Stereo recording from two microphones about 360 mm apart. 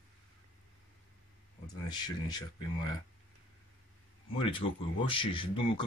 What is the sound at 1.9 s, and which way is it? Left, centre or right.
Speech, centre.